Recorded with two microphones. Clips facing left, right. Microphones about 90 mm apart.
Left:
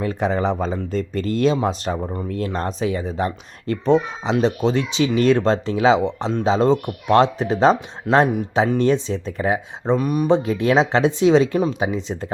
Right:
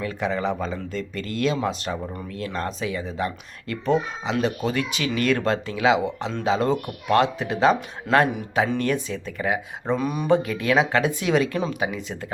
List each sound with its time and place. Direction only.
0.0 s speech: 35° left (ahead or behind)
8.1 s speech: 20° left (ahead or behind)
10.0 s a sound: 5° left (ahead or behind)
10.2 s speech: 25° left (ahead or behind)